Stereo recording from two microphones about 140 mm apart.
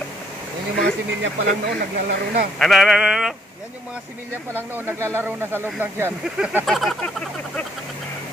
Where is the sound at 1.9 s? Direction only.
90° right.